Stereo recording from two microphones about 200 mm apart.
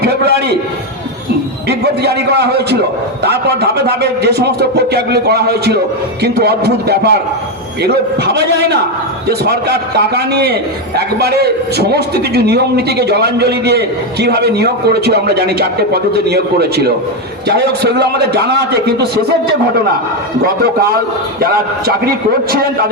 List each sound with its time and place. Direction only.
0.0 s a sound: 55° right (ahead or behind)
2.0 s a man's voice: 55° right (ahead or behind)
21.4 s a man's voice: 50° right (ahead or behind)